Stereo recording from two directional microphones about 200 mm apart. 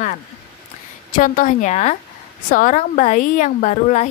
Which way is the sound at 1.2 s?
40° left (ahead or behind).